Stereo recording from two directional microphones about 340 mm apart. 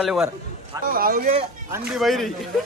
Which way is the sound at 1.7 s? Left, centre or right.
Centre.